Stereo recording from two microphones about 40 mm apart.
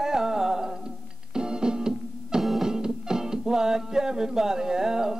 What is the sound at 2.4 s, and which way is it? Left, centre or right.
Music, centre.